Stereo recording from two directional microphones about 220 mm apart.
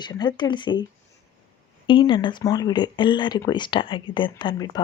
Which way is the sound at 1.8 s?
20° left (ahead or behind).